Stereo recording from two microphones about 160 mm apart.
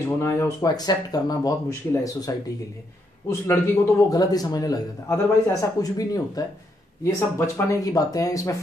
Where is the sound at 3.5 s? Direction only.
20° left (ahead or behind).